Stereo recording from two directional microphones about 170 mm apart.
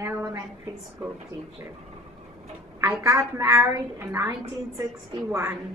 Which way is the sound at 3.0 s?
15° right (ahead or behind).